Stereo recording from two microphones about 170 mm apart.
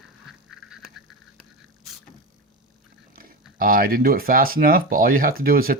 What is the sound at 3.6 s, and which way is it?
Speech, 55° right (ahead or behind).